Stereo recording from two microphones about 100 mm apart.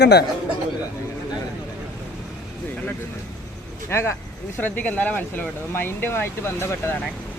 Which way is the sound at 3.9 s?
25° left (ahead or behind).